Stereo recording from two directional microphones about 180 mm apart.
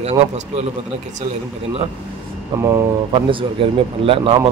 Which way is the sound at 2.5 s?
15° right (ahead or behind).